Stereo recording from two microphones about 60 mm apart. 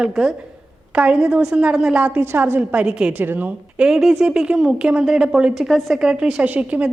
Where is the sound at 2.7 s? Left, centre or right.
Centre.